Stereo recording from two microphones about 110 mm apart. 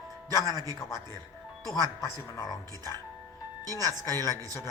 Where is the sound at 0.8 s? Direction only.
25° left (ahead or behind).